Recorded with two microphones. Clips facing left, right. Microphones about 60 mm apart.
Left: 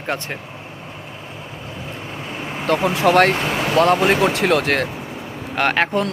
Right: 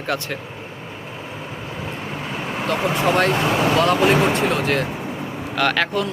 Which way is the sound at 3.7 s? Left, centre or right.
Left.